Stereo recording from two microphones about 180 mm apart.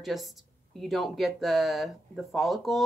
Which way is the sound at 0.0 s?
Centre (ahead or behind).